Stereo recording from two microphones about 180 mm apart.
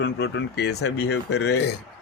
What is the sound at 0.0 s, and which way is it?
Speech, 70° left (ahead or behind).